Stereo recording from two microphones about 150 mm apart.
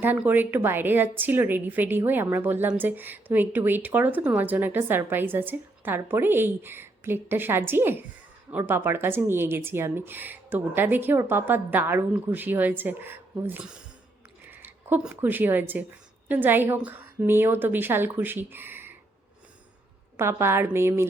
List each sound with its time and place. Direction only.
0.0 s a woman's voice: 10° right (ahead or behind)
20.1 s a woman's voice: 15° right (ahead or behind)